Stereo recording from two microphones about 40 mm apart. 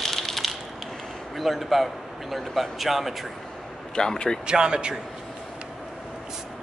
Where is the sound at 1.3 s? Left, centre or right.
Centre.